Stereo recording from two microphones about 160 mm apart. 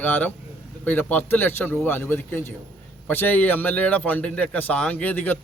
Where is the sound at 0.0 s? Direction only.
10° left (ahead or behind).